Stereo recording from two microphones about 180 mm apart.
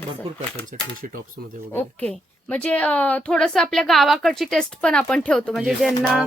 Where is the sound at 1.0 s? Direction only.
50° right (ahead or behind).